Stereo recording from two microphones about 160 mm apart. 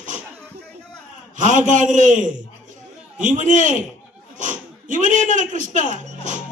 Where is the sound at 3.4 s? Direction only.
50° right (ahead or behind).